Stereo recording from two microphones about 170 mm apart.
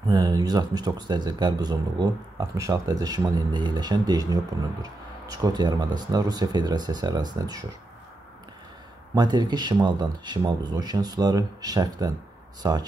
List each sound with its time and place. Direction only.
0.1 s speech: 20° right (ahead or behind)
9.1 s speech: 25° right (ahead or behind)